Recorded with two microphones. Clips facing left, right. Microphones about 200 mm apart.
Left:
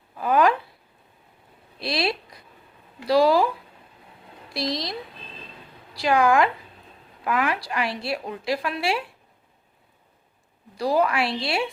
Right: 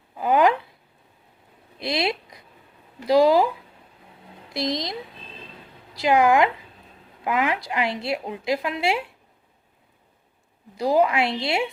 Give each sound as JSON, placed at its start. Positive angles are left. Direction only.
{"t": 0.2, "sound": "a woman's voice", "side_deg": -20}
{"t": 1.8, "sound": "a woman's voice", "side_deg": -20}
{"t": 4.5, "sound": "a woman's voice", "side_deg": -20}
{"t": 10.8, "sound": "a woman's voice", "side_deg": -20}